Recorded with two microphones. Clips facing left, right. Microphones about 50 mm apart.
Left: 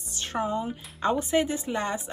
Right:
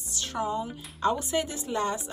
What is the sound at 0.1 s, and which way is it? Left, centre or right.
Speech, left.